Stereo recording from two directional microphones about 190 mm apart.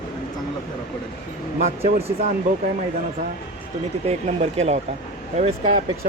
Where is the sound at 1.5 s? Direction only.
35° right (ahead or behind).